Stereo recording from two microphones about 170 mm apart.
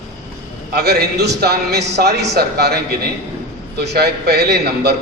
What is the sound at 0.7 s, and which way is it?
A man's voice, 70° right (ahead or behind).